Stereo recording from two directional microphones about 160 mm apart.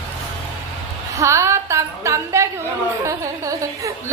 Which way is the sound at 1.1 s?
20° right (ahead or behind).